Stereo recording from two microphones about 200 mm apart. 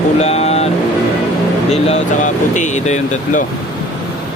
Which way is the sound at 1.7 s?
35° left (ahead or behind).